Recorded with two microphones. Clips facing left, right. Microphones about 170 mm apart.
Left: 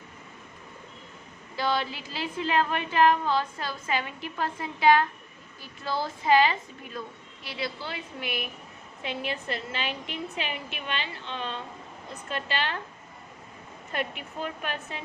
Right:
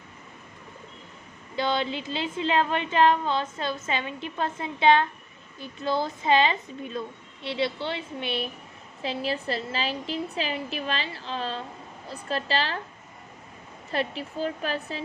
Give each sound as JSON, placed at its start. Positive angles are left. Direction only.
{"t": 1.5, "sound": "a woman's voice", "side_deg": -20}
{"t": 13.9, "sound": "a woman's voice", "side_deg": -30}